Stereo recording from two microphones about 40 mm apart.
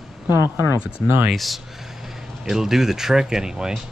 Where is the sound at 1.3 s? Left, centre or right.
Centre.